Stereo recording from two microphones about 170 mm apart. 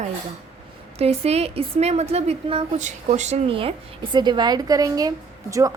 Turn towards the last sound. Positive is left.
turn(degrees=-20)  # may be behind; listen again after turning